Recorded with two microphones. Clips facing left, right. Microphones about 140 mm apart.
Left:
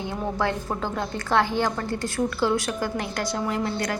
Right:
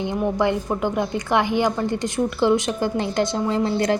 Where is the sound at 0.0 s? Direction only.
15° right (ahead or behind).